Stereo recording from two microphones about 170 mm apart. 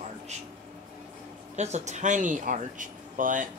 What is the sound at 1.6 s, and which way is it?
Speech, 40° right (ahead or behind).